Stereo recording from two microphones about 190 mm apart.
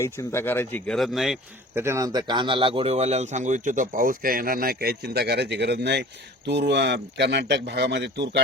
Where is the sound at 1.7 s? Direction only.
15° right (ahead or behind).